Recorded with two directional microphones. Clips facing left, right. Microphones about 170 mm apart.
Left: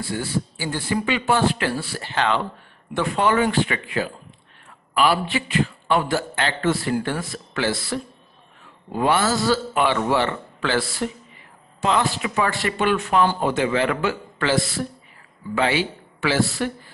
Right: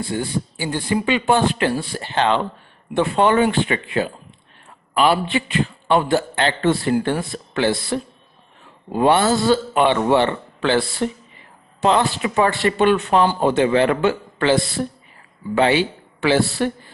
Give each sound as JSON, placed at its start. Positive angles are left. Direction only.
{"t": 0.0, "sound": "a man's voice", "side_deg": -20}